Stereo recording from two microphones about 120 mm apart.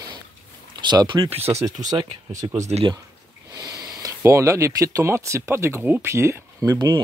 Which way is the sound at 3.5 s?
30° right (ahead or behind).